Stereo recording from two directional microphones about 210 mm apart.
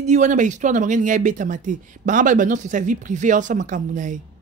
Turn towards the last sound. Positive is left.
turn(degrees=-35)  # may be behind; listen again after turning